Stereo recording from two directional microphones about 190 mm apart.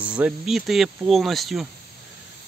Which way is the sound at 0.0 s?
5° right (ahead or behind).